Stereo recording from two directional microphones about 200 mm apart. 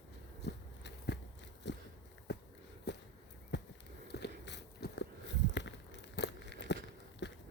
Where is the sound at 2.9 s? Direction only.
55° left (ahead or behind).